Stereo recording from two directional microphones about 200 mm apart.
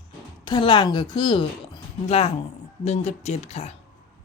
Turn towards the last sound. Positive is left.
turn(degrees=30)  # may be behind; listen again after turning